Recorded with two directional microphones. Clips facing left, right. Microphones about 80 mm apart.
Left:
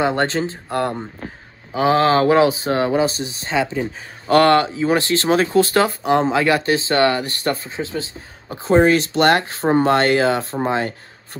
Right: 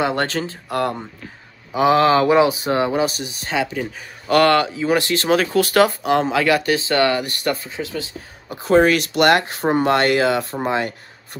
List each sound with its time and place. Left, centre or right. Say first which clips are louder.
0.0 s speech: left 2 dB; left